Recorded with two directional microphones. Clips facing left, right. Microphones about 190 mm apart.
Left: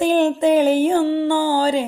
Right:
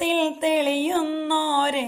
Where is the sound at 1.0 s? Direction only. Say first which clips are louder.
Left 6 dB; 35° left (ahead or behind).